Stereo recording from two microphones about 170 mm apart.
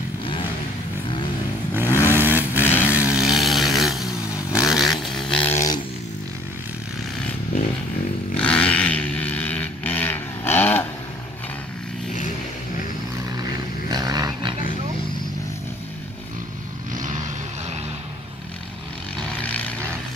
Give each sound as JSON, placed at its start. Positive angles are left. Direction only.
{"t": 1.7, "sound": "vehicle", "side_deg": -15}
{"t": 4.5, "sound": "a sound", "side_deg": -5}
{"t": 8.4, "sound": "vehicle", "side_deg": 5}
{"t": 13.8, "sound": "a sound", "side_deg": -25}
{"t": 16.9, "sound": "vehicle", "side_deg": -50}
{"t": 19.4, "sound": "vehicle", "side_deg": 10}